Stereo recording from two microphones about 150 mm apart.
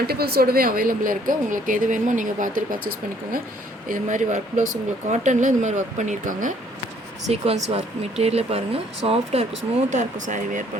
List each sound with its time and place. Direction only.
0.1 s a woman's voice: 90° right; by 6.5 s 55° right (ahead or behind)
7.3 s speech: 45° right (ahead or behind)
9.9 s a woman's voice: 55° right (ahead or behind)